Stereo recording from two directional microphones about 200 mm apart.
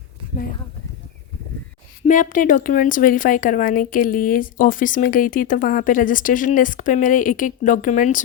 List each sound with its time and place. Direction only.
2.0 s speech: 40° left (ahead or behind)